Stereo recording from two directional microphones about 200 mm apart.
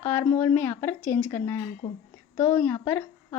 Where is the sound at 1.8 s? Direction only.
25° left (ahead or behind).